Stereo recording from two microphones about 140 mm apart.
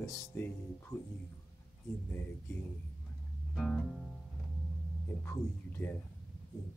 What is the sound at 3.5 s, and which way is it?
Music, 5° left (ahead or behind).